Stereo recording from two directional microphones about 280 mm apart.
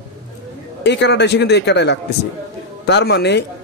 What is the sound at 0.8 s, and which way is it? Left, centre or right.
Speech, left.